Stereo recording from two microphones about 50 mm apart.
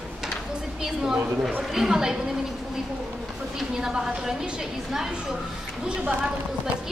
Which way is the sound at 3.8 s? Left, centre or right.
Centre.